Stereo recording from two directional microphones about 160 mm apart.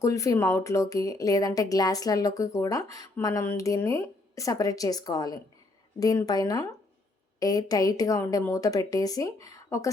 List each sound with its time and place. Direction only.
0.0 s speech: 20° left (ahead or behind)